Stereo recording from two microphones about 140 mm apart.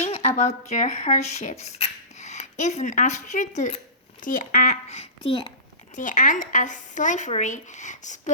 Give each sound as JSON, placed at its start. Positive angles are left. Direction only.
{"t": 0.0, "sound": "speech", "side_deg": 50}
{"t": 6.0, "sound": "speech", "side_deg": 65}